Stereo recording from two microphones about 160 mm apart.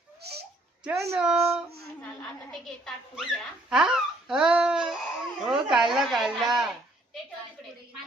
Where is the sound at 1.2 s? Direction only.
5° right (ahead or behind).